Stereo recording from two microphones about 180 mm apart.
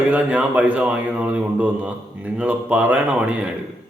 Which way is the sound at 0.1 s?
5° right (ahead or behind).